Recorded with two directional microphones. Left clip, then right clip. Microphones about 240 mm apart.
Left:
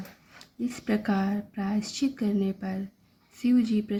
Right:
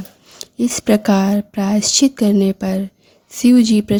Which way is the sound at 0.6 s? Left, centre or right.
Right.